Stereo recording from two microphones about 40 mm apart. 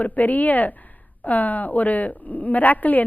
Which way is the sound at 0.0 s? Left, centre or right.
Left.